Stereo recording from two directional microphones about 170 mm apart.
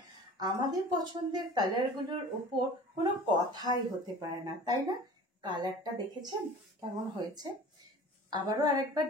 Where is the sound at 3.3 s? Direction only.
25° right (ahead or behind).